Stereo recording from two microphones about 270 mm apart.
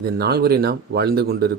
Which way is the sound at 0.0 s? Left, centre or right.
Right.